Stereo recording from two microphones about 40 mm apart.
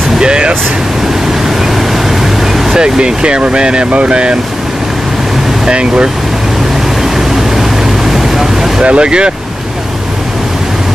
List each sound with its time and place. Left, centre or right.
0.2 s vehicle: right
2.7 s speech: centre
5.7 s speech: right
7.2 s vehicle: centre
8.8 s speech: right